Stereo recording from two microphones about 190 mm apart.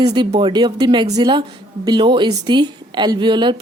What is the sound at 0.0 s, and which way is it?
Speech, 20° right (ahead or behind).